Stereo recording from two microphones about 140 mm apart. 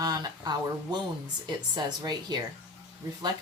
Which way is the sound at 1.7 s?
30° right (ahead or behind).